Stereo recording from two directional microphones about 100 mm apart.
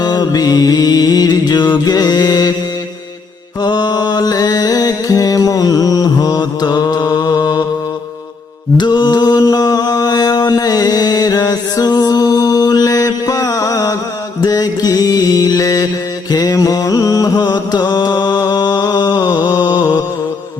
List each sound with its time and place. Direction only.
0.0 s music: 40° left (ahead or behind)
3.6 s mantra: 45° left (ahead or behind)
8.8 s mantra: 45° left (ahead or behind)
16.3 s music: 40° left (ahead or behind)